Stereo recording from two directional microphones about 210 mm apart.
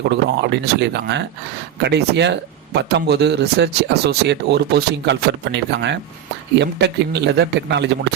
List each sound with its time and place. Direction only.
0.1 s speech: 55° right (ahead or behind)